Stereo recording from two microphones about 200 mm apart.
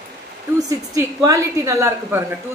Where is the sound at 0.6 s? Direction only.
15° right (ahead or behind).